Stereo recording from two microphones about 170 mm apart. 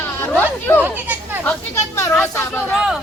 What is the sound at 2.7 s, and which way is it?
Speech, 5° right (ahead or behind).